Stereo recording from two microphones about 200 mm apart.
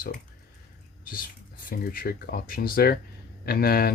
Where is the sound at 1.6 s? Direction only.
45° left (ahead or behind).